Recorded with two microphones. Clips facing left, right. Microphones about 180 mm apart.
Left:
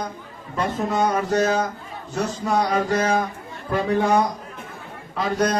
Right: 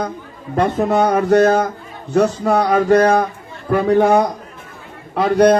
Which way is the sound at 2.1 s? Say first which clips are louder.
Right 8 dB; 60° right (ahead or behind).